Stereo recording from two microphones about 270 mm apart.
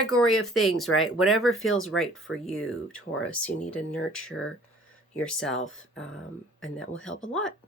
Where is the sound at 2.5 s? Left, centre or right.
Centre.